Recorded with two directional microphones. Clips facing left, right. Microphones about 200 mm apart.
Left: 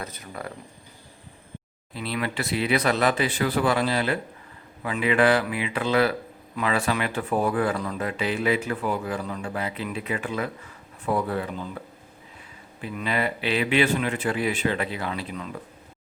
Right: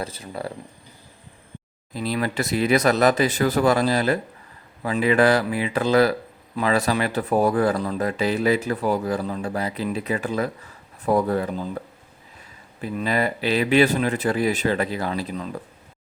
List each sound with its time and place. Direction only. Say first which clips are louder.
0.0 s speech: right 5 dB; 30° right (ahead or behind)
1.9 s speech: right 4 dB; 40° right (ahead or behind)
12.8 s speech: right 4 dB; 40° right (ahead or behind)